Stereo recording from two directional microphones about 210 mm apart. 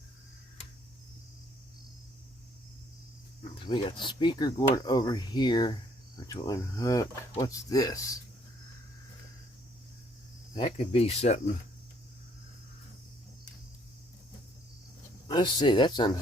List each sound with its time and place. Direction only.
3.5 s speech: 25° left (ahead or behind)
10.5 s speech: 25° left (ahead or behind)
15.3 s speech: 20° left (ahead or behind)